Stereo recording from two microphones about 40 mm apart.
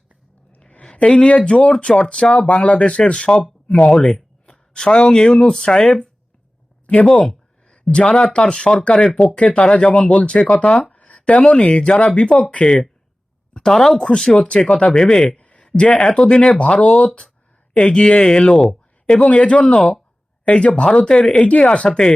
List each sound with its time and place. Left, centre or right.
1.0 s speech: left
2.5 s speech: left; by 6.1 s centre
6.8 s speech: left
8.0 s speech: centre
14.4 s speech: left
19.2 s speech: left
19.6 s speech: centre
20.4 s speech: left